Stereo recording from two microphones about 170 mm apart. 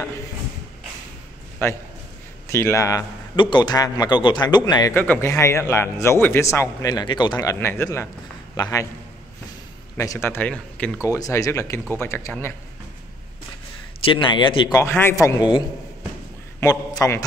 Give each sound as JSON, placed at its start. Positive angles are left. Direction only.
{"t": 2.4, "sound": "a man's voice", "side_deg": 15}
{"t": 4.9, "sound": "a man's voice", "side_deg": 10}
{"t": 9.9, "sound": "a man's voice", "side_deg": 15}
{"t": 11.1, "sound": "a man's voice", "side_deg": 20}
{"t": 14.0, "sound": "a man's voice", "side_deg": 30}
{"t": 14.8, "sound": "a man's voice", "side_deg": 15}